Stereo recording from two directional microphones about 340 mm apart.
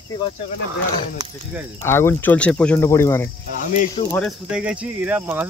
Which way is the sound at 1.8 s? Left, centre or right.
Centre.